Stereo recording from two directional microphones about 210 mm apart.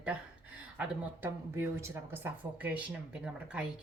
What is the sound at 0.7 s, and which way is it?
Speech, 10° right (ahead or behind).